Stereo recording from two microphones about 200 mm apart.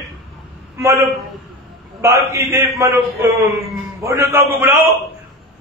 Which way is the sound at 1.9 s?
15° right (ahead or behind).